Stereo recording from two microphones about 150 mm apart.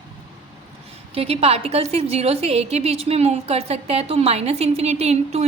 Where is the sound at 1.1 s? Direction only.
40° right (ahead or behind).